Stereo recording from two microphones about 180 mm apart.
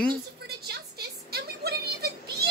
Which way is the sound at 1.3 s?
65° right (ahead or behind).